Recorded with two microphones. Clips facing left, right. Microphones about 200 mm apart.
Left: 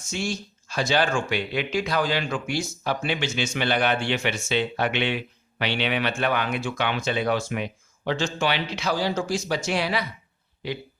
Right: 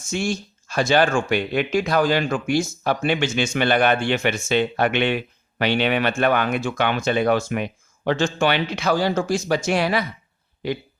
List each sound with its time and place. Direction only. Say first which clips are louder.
0.1 s speech: right 5 dB; 50° right (ahead or behind)